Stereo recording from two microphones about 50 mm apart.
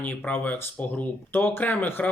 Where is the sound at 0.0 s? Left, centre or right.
Left.